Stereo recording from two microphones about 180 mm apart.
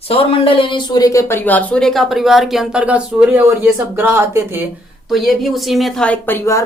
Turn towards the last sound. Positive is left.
turn(degrees=15)  # may be behind; listen again after turning